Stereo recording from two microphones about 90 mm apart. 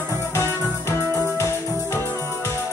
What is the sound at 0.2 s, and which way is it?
Music, 30° left (ahead or behind).